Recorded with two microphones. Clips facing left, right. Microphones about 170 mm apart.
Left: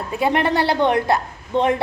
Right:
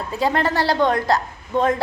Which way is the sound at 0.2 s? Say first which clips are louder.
Left 2 dB; 20° left (ahead or behind).